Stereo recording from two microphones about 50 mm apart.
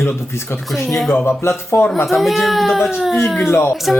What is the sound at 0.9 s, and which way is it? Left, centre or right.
Speech, centre.